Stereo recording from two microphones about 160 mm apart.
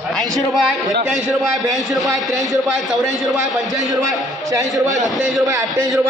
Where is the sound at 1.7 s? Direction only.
Centre (ahead or behind).